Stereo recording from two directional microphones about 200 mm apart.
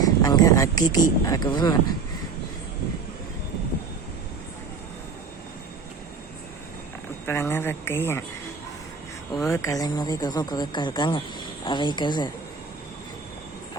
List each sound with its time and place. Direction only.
0.0 s speech: 20° left (ahead or behind)
7.3 s a woman's voice: 10° left (ahead or behind)
9.5 s speech: 15° left (ahead or behind)